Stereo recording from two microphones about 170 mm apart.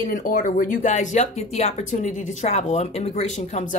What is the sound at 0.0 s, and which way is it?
A woman's voice, 50° left (ahead or behind).